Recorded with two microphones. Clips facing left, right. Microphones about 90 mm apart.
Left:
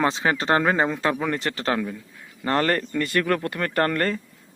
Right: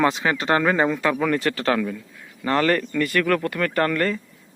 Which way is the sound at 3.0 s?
25° left (ahead or behind).